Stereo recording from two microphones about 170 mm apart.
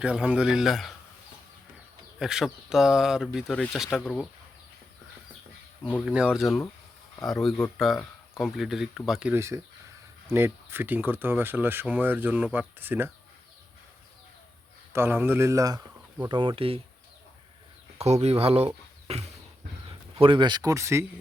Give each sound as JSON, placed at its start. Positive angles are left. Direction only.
{"t": 0.0, "sound": "speech", "side_deg": -5}
{"t": 2.1, "sound": "speech", "side_deg": 0}
{"t": 5.8, "sound": "speech", "side_deg": -5}
{"t": 9.3, "sound": "speech", "side_deg": -15}
{"t": 14.9, "sound": "speech", "side_deg": -15}
{"t": 17.9, "sound": "speech", "side_deg": -40}